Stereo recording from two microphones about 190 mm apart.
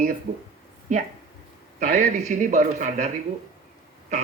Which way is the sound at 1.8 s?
45° right (ahead or behind).